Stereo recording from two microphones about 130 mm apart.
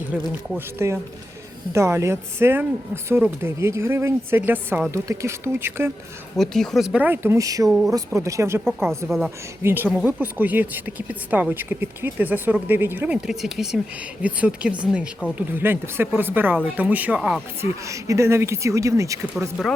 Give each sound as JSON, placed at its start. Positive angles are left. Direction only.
{"t": 0.1, "sound": "speech", "side_deg": -10}
{"t": 0.5, "sound": "speech", "side_deg": -20}
{"t": 6.3, "sound": "speech", "side_deg": 5}
{"t": 7.0, "sound": "speech", "side_deg": -15}
{"t": 9.0, "sound": "speech", "side_deg": 0}
{"t": 9.6, "sound": "speech", "side_deg": -15}
{"t": 13.2, "sound": "speech", "side_deg": 0}
{"t": 17.6, "sound": "speech", "side_deg": -25}